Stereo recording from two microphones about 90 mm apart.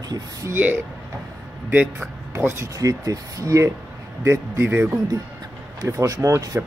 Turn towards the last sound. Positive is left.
turn(degrees=-40)  # may be behind; listen again after turning